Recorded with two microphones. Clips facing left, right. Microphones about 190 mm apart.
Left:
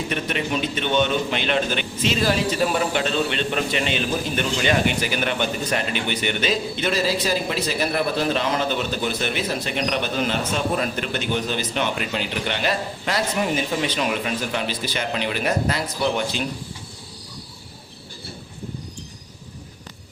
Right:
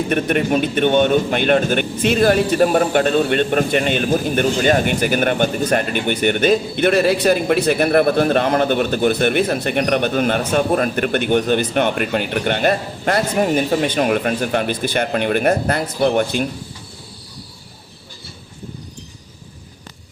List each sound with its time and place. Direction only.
0.1 s a man's voice: 50° right (ahead or behind)